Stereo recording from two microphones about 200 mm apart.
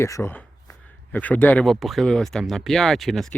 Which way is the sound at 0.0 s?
15° left (ahead or behind).